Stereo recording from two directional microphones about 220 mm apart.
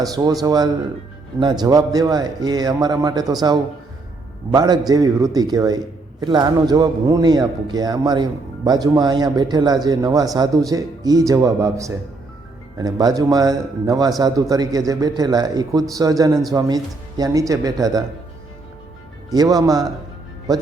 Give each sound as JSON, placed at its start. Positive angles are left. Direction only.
{"t": 0.0, "sound": "a man's voice", "side_deg": -15}
{"t": 4.5, "sound": "a man's voice", "side_deg": -15}
{"t": 19.3, "sound": "a man's voice", "side_deg": -15}